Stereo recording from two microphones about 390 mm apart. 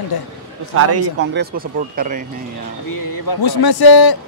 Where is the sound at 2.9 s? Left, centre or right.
Left.